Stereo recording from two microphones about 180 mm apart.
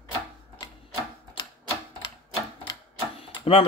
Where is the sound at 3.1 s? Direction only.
30° left (ahead or behind).